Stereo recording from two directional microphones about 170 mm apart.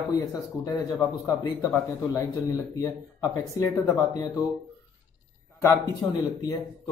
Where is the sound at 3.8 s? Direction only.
20° left (ahead or behind).